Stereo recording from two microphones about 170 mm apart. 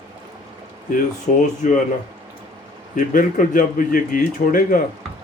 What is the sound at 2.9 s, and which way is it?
Speech, 50° left (ahead or behind).